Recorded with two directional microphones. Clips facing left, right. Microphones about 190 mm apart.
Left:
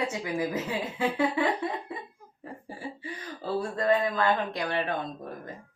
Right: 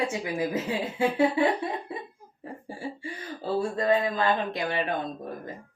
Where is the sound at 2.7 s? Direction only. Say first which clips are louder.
Right 3 dB; 25° right (ahead or behind).